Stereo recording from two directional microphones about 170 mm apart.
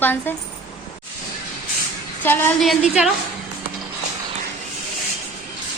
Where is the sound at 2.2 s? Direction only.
10° left (ahead or behind).